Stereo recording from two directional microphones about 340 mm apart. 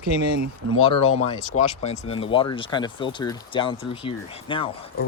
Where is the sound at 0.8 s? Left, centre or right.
Centre.